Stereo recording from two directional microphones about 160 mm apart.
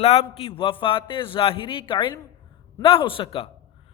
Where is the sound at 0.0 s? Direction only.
40° left (ahead or behind).